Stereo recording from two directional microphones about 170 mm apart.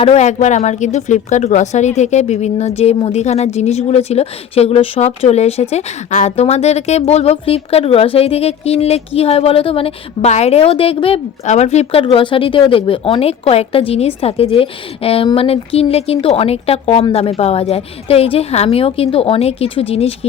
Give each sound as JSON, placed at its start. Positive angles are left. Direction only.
{"t": 0.0, "sound": "speech", "side_deg": 40}